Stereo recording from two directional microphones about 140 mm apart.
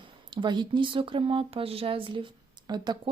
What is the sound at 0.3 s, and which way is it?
Speech, 30° right (ahead or behind).